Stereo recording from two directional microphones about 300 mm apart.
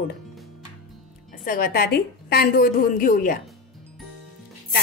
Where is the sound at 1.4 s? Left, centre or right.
Left.